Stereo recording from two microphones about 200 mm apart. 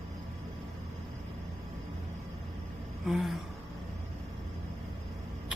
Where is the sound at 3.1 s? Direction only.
Centre (ahead or behind).